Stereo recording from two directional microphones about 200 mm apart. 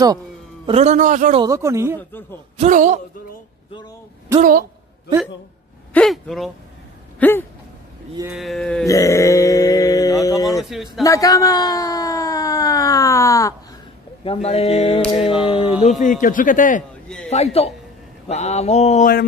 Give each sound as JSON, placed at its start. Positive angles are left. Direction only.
{"t": 0.7, "sound": "a man's voice", "side_deg": -35}
{"t": 1.3, "sound": "speech", "side_deg": -20}
{"t": 2.5, "sound": "a man's voice", "side_deg": -35}
{"t": 4.4, "sound": "a woman's voice", "side_deg": -45}
{"t": 5.9, "sound": "speech", "side_deg": 0}
{"t": 7.2, "sound": "a sound", "side_deg": 10}
{"t": 8.4, "sound": "speech", "side_deg": 0}
{"t": 8.8, "sound": "sheep", "side_deg": 15}
{"t": 10.4, "sound": "speech", "side_deg": 0}
{"t": 11.1, "sound": "speech", "side_deg": 15}
{"t": 14.2, "sound": "a sound", "side_deg": 30}
{"t": 16.0, "sound": "speech", "side_deg": 40}